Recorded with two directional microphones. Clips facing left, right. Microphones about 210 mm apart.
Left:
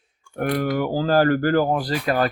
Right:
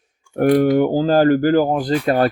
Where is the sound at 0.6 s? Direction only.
25° right (ahead or behind).